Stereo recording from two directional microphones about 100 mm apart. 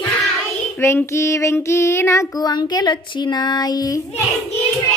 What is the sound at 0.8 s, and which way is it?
Child singing, 25° left (ahead or behind).